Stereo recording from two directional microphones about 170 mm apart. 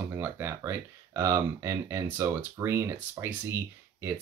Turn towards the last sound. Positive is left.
turn(degrees=-15)  # may be behind; listen again after turning